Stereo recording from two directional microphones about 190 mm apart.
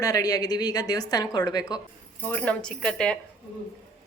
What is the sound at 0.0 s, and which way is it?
A woman's voice, 20° left (ahead or behind).